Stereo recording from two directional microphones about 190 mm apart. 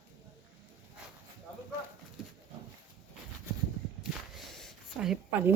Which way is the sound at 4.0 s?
Centre (ahead or behind).